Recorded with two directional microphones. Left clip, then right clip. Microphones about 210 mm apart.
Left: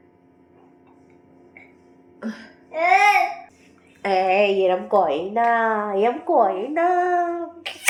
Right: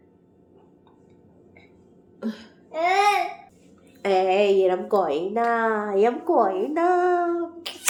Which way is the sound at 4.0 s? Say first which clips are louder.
Left 2 dB; centre (ahead or behind).